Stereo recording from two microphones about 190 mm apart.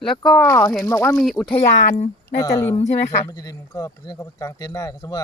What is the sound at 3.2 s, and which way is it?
Speech, 20° left (ahead or behind).